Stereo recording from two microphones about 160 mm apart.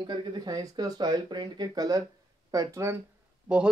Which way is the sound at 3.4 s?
5° right (ahead or behind).